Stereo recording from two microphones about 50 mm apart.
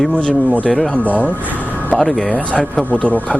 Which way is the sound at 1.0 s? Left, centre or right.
Left.